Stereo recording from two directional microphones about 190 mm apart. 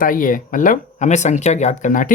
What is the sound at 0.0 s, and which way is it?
Speech, 45° left (ahead or behind).